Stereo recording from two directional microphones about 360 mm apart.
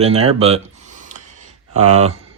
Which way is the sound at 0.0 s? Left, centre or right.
Centre.